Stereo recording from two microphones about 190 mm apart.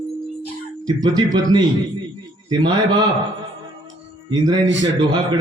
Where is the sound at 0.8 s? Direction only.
20° right (ahead or behind).